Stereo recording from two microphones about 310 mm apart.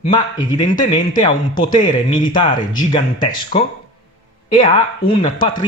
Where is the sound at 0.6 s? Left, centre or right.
Left.